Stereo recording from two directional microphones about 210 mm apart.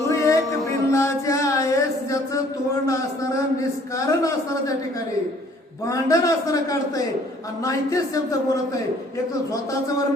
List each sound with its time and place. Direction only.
0.1 s music: 15° left (ahead or behind)
3.9 s speech: 15° left (ahead or behind)
5.9 s speech: 15° left (ahead or behind)